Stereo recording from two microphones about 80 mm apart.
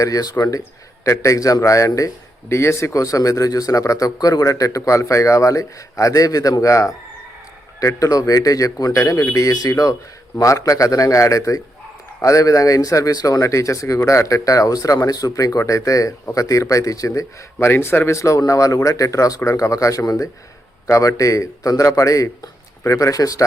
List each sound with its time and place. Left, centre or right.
0.0 s a man's voice: left